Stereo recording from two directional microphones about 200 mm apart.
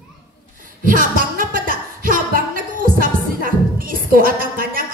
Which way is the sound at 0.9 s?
45° right (ahead or behind).